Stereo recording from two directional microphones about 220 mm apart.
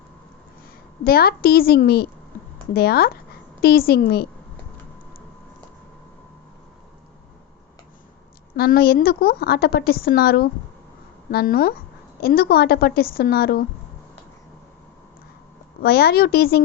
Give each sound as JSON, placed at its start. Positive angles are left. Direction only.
{"t": 1.0, "sound": "a woman's voice", "side_deg": 45}
{"t": 8.5, "sound": "a woman's voice", "side_deg": 45}
{"t": 15.8, "sound": "a woman's voice", "side_deg": 45}